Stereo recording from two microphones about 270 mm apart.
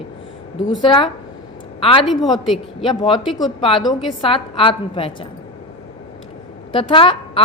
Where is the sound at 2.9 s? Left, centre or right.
Centre.